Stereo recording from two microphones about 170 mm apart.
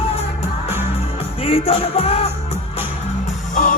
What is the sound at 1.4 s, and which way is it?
Music, 35° left (ahead or behind).